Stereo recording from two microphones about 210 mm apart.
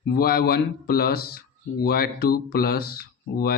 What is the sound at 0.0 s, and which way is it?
Speech, 50° left (ahead or behind).